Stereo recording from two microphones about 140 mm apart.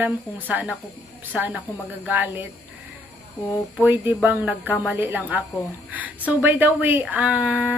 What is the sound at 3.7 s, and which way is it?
Speech, 15° right (ahead or behind).